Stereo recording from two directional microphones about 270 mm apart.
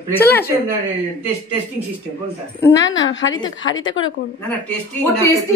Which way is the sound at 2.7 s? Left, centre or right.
Left.